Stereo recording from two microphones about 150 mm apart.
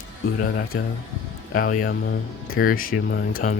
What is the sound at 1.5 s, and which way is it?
Speech, 65° left (ahead or behind).